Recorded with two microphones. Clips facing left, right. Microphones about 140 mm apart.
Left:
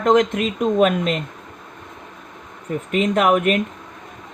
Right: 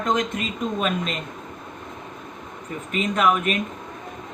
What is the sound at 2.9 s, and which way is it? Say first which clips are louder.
Speech: left 4 dB; 60° left (ahead or behind).